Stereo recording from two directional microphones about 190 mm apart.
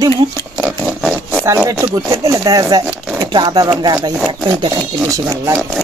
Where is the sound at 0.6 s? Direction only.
5° right (ahead or behind).